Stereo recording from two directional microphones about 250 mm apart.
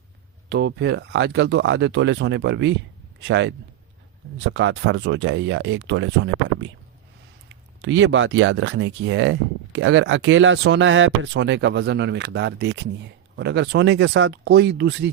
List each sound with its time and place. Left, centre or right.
0.4 s speech: right
7.8 s speech: right